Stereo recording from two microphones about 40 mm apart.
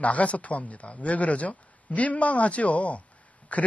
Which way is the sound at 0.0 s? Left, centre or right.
Left.